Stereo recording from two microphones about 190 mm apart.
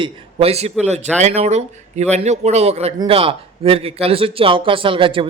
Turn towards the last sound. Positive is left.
turn(degrees=-25)  # may be behind; listen again after turning